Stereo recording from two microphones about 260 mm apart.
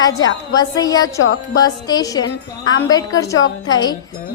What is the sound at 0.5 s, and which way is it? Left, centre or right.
A woman's voice, centre.